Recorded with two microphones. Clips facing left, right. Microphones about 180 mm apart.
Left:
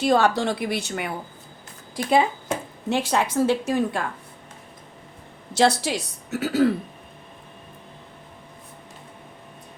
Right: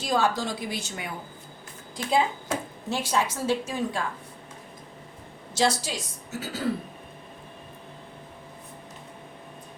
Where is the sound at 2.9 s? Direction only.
65° left (ahead or behind).